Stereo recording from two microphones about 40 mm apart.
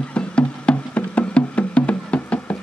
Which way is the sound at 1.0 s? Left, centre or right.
Left.